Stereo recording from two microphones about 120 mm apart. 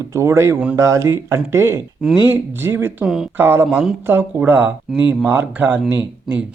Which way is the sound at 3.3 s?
20° right (ahead or behind).